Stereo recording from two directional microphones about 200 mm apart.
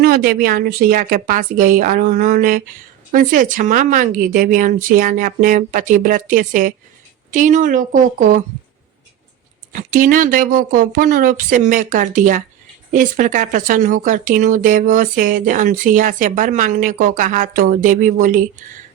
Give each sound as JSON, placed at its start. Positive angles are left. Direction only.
{"t": 0.0, "sound": "speech", "side_deg": -50}
{"t": 9.9, "sound": "speech", "side_deg": -45}